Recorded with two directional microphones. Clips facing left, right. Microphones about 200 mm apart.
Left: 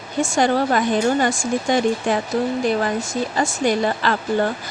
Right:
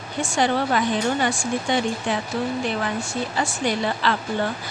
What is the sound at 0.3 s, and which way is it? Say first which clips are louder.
Speech: left 3 dB; 45° left (ahead or behind).